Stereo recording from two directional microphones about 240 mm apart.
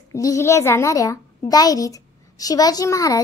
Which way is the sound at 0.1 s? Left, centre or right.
Centre.